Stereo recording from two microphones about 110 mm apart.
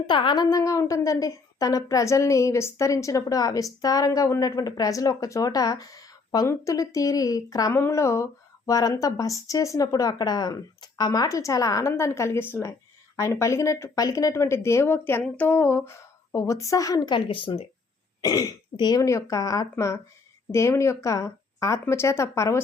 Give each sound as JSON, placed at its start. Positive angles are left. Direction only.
{"t": 0.1, "sound": "speech", "side_deg": 45}
{"t": 0.5, "sound": "a woman's voice", "side_deg": 30}
{"t": 17.2, "sound": "speech", "side_deg": 50}
{"t": 18.2, "sound": "a woman's voice", "side_deg": 35}